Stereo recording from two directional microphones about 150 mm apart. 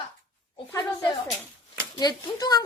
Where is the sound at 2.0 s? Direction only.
25° left (ahead or behind).